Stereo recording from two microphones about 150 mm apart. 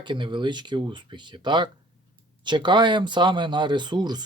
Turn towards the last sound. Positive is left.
turn(degrees=-30)  # may be behind; listen again after turning